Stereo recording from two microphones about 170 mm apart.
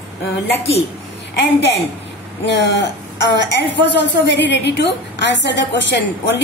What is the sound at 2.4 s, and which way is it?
A woman's voice, 90° left.